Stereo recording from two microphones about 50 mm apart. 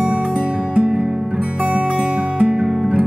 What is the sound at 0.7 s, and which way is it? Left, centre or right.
Music, centre.